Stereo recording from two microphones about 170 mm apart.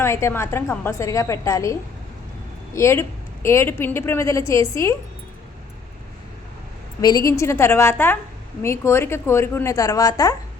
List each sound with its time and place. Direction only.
0.0 s a woman's voice: 15° left (ahead or behind)
7.0 s a woman's voice: 20° left (ahead or behind)